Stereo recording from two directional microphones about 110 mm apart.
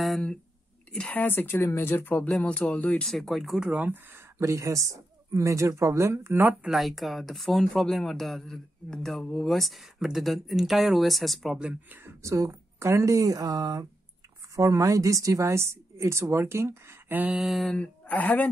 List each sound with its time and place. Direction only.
0.0 s speech: 5° left (ahead or behind)
3.1 s speech: centre (ahead or behind); by 4.2 s 15° right (ahead or behind)
4.4 s speech: 30° right (ahead or behind)
6.6 s speech: centre (ahead or behind)
12.0 s speech: 25° right (ahead or behind)
17.4 s speech: centre (ahead or behind)
17.7 s speech: 15° left (ahead or behind)